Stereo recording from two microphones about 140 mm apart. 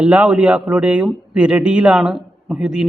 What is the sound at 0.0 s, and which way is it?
Speech, 10° right (ahead or behind).